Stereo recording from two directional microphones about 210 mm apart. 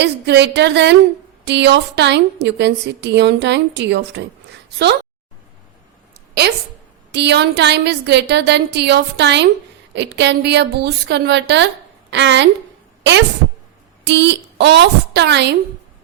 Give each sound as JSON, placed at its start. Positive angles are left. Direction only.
{"t": 0.0, "sound": "a woman's voice", "side_deg": -55}
{"t": 6.4, "sound": "a woman's voice", "side_deg": -50}